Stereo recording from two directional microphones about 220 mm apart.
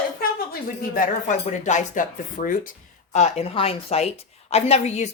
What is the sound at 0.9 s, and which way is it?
Speech, 35° left (ahead or behind).